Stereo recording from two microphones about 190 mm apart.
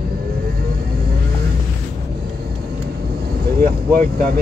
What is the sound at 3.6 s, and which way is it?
Vehicle, 50° right (ahead or behind).